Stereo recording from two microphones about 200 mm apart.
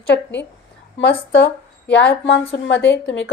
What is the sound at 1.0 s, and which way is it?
A woman's voice, 65° left (ahead or behind).